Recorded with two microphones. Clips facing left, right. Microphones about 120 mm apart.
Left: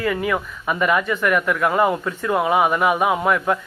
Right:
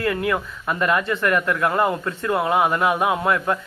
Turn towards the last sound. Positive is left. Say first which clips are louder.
# left 2 dB
turn(degrees=5)  # may be behind; listen again after turning